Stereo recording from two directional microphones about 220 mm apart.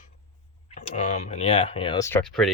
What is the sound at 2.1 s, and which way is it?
Speech, 5° left (ahead or behind).